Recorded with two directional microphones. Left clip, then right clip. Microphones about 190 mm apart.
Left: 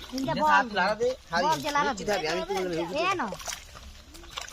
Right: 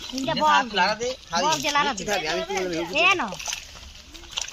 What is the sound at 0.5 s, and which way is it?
Speech, 40° left (ahead or behind).